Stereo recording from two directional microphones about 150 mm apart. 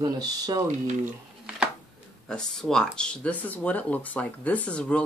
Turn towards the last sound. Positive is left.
turn(degrees=10)  # may be behind; listen again after turning